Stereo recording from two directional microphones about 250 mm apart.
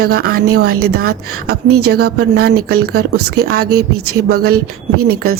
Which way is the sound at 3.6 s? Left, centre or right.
Right.